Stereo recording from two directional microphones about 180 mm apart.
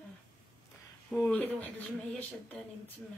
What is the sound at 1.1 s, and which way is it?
Speech, 5° left (ahead or behind).